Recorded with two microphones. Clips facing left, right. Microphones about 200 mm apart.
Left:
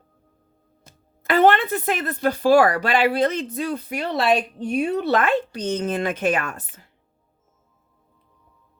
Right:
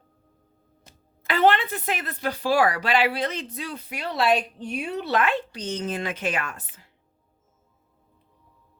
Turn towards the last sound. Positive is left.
turn(degrees=50)  # may be behind; listen again after turning